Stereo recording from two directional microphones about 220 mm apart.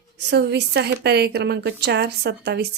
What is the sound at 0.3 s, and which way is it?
A woman's voice, 50° right (ahead or behind).